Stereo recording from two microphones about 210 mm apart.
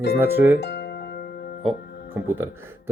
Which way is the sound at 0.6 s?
55° left (ahead or behind).